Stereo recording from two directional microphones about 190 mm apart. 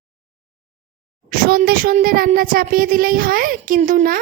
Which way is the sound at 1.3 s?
50° right (ahead or behind).